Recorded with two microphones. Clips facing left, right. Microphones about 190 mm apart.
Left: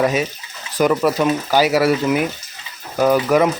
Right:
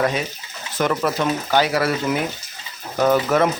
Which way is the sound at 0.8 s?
5° left (ahead or behind).